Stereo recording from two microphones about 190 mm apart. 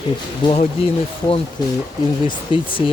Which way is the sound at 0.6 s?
30° left (ahead or behind).